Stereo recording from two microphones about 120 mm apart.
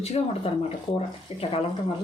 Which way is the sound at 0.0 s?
60° left (ahead or behind).